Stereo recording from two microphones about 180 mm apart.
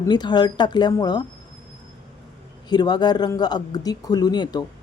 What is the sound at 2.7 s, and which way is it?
Speech, 25° left (ahead or behind).